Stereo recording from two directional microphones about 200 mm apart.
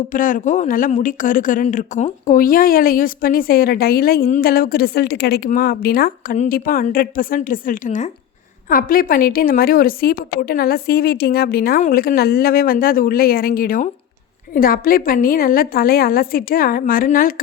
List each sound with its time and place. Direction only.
0.1 s speech: 40° left (ahead or behind)